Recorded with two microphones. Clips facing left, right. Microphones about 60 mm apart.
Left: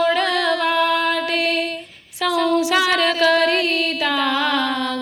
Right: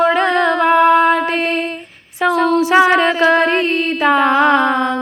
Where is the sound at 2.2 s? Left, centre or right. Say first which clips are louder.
Right 5 dB; right.